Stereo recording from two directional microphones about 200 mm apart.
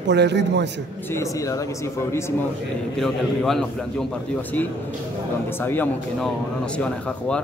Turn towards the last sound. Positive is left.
turn(degrees=5)  # may be behind; listen again after turning